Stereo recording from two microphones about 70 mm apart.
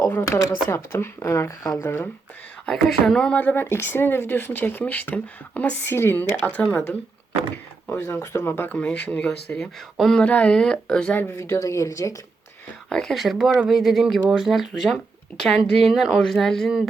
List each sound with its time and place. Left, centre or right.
0.0 s a sound: left
0.3 s speech: left
0.7 s speech: left
1.5 s speech: left
2.6 s speech: centre
3.3 s speech: left
5.8 s speech: left
8.0 s speech: left
8.4 s speech: left
8.8 s speech: centre
10.2 s speech: centre
11.1 s speech: left
11.3 s speech: left
12.9 s a woman's voice: centre